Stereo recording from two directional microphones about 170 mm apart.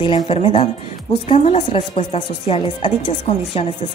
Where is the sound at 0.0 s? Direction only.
30° left (ahead or behind).